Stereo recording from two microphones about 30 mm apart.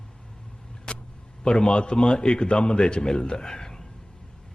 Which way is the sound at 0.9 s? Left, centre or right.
Left.